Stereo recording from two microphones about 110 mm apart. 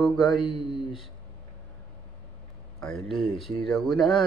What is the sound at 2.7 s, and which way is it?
Speech, 5° left (ahead or behind).